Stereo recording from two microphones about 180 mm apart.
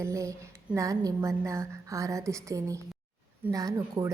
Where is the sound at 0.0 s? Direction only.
15° right (ahead or behind).